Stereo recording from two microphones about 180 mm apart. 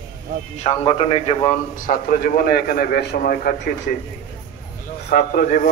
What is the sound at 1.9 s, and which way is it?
A man's voice, 50° left (ahead or behind).